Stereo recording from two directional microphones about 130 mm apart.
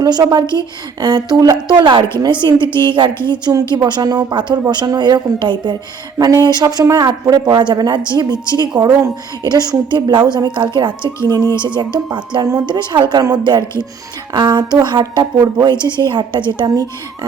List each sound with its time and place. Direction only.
0.0 s speech: 30° right (ahead or behind)